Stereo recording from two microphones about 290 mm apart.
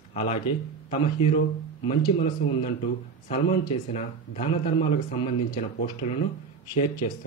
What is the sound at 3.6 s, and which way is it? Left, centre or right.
Speech, left.